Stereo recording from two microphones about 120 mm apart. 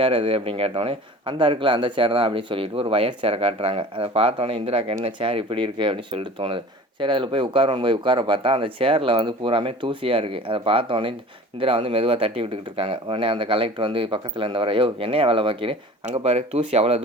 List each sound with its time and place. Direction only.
0.0 s speech: 45° right (ahead or behind)
16.0 s speech: 60° right (ahead or behind)